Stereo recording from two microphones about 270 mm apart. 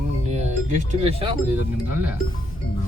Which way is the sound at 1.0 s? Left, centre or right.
Right.